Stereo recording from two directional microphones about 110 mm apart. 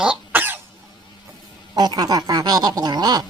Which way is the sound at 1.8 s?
35° right (ahead or behind).